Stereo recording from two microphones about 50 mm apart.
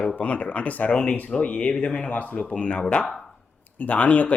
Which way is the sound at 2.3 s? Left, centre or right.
Left.